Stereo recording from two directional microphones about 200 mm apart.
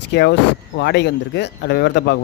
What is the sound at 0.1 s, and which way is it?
Speech, 55° left (ahead or behind).